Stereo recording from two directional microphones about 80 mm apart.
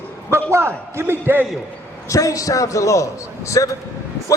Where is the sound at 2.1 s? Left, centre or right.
Left.